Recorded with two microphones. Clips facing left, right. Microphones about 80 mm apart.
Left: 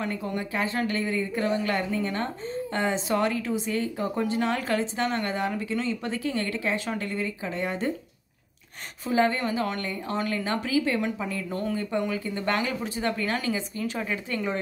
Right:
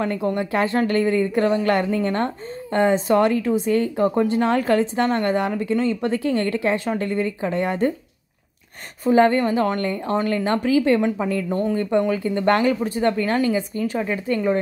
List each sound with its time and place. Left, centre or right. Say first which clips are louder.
0.0 s speech: right 8 dB; right
9.0 s speech: right 8 dB; right